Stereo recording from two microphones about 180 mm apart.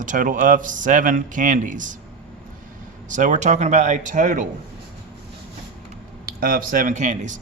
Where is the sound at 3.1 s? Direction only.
45° right (ahead or behind).